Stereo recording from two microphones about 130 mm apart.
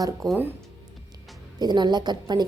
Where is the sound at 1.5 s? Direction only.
35° right (ahead or behind).